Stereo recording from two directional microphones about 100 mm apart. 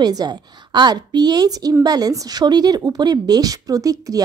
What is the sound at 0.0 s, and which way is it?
A woman's voice, 40° right (ahead or behind).